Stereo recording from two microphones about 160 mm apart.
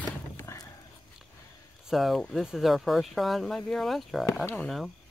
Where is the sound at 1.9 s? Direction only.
Centre (ahead or behind).